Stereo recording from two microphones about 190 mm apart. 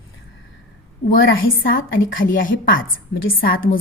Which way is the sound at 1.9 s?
80° left.